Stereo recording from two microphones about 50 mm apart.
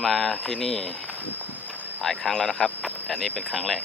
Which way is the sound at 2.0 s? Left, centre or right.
Centre.